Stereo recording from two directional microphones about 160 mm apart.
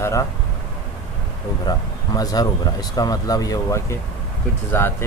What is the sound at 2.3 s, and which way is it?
Speech, 25° left (ahead or behind).